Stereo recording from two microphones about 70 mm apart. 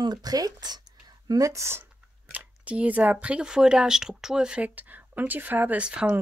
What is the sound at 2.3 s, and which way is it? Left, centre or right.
Speech, centre.